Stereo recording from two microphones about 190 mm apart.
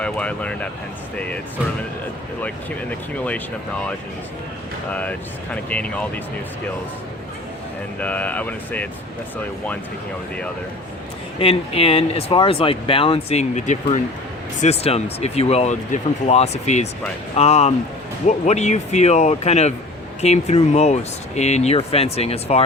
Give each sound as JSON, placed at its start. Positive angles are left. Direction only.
{"t": 0.0, "sound": "speech", "side_deg": 5}
{"t": 4.9, "sound": "speech", "side_deg": 5}
{"t": 8.0, "sound": "speech", "side_deg": 10}
{"t": 11.3, "sound": "speech", "side_deg": 30}